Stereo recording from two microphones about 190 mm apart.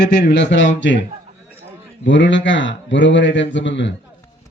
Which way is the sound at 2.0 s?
70° left (ahead or behind).